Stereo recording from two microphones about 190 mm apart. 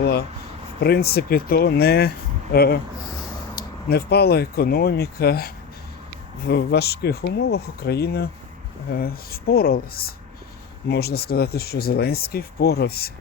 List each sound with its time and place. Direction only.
0.0 s a sound: 55° left (ahead or behind)
0.8 s speech: 55° left (ahead or behind)
6.5 s speech: 60° left (ahead or behind)